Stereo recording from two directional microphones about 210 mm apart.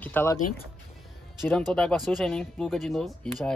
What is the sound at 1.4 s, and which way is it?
Speech, centre (ahead or behind).